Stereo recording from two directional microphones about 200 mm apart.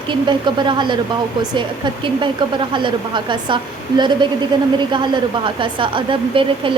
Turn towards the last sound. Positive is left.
turn(degrees=-25)  # may be behind; listen again after turning